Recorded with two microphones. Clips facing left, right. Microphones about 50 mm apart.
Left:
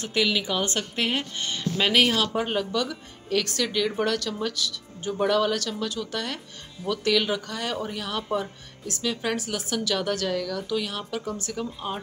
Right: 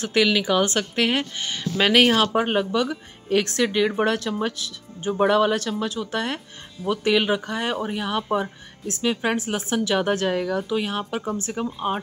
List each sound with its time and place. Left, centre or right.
0.2 s speech: right
0.7 s a woman's voice: right